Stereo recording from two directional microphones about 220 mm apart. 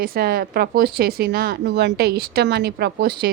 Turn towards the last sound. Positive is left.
turn(degrees=-45)  # may be behind; listen again after turning